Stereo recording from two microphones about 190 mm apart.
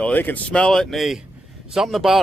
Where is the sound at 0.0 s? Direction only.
10° left (ahead or behind).